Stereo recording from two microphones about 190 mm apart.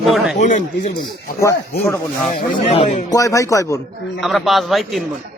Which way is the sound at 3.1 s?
15° left (ahead or behind).